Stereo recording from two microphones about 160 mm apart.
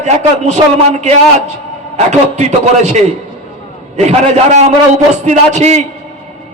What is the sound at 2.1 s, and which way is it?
A man's voice, 45° right (ahead or behind).